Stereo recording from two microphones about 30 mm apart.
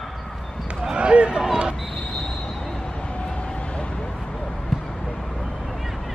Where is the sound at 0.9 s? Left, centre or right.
Right.